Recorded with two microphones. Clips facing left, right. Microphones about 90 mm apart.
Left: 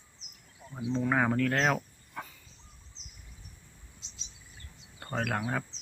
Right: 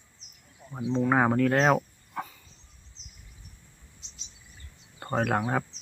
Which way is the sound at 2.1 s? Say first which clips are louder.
Right 6 dB; 5° right (ahead or behind).